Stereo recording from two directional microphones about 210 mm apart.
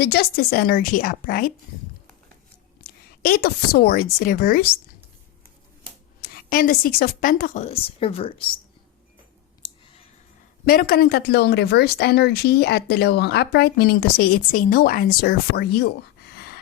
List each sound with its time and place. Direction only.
0.0 s a woman's voice: 50° left (ahead or behind)
2.8 s a woman's voice: 45° left (ahead or behind)
6.2 s a woman's voice: 45° left (ahead or behind); by 8.5 s 25° left (ahead or behind)
9.6 s clicking: 25° left (ahead or behind)
10.7 s a woman's voice: 45° left (ahead or behind)
16.3 s a sound: 50° left (ahead or behind)